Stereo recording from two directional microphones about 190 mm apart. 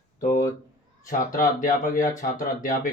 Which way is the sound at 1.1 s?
45° left (ahead or behind).